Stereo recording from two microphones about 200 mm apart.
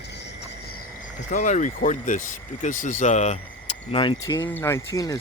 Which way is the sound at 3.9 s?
25° left (ahead or behind).